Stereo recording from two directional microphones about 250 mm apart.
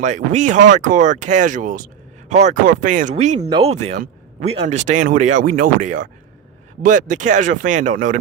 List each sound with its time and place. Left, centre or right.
0.0 s speech: right